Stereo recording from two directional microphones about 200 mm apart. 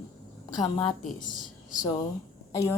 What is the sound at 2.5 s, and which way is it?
Speech, 15° left (ahead or behind).